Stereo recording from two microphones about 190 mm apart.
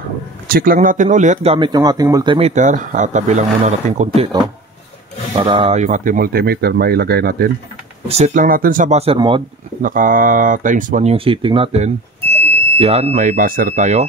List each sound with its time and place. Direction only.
0.5 s speech: 50° right (ahead or behind); by 2.5 s 25° right (ahead or behind)
2.5 s speech: 40° right (ahead or behind)
5.4 s speech: 30° right (ahead or behind); by 7.4 s 55° right (ahead or behind)
8.1 s speech: 35° right (ahead or behind)
8.5 s speech: 50° right (ahead or behind); by 9.4 s 30° right (ahead or behind)
9.8 s speech: 45° right (ahead or behind)